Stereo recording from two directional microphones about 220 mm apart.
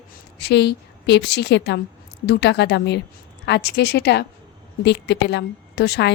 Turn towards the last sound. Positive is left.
turn(degrees=50)  # may be behind; listen again after turning